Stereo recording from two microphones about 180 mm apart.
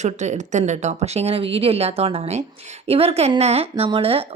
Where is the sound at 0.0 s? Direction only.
40° right (ahead or behind).